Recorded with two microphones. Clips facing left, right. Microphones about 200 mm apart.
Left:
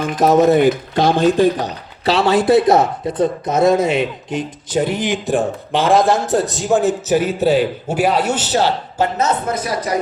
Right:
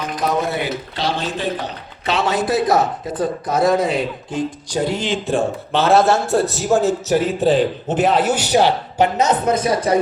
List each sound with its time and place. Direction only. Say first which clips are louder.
0.0 s speech: left 8 dB; 45° left (ahead or behind)
2.0 s speech: left 5 dB; 35° left (ahead or behind); by 7.2 s 15° left (ahead or behind)
7.3 s a man's voice: left 1 dB; 5° left (ahead or behind); by 10.0 s 25° right (ahead or behind)